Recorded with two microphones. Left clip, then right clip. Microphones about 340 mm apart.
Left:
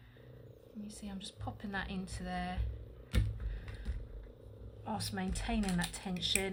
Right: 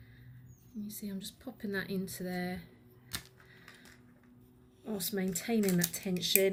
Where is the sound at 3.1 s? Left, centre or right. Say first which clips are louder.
Even; centre.